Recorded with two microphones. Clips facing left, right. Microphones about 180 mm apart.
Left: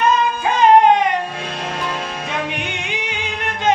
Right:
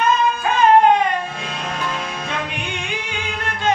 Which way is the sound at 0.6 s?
20° left (ahead or behind).